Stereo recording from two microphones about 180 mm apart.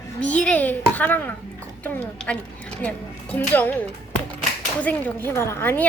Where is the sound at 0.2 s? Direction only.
5° left (ahead or behind).